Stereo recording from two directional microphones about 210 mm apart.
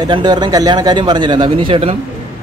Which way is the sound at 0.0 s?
20° right (ahead or behind).